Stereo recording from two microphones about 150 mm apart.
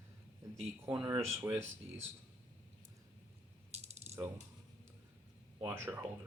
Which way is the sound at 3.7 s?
45° right (ahead or behind).